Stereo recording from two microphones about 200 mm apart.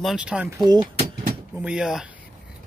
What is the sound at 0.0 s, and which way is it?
Speech, 5° right (ahead or behind).